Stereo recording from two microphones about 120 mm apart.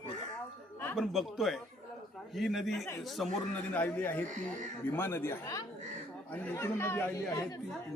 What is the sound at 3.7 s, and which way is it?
Speech, 15° left (ahead or behind).